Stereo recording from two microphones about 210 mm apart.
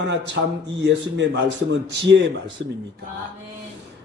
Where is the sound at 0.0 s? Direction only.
60° right (ahead or behind).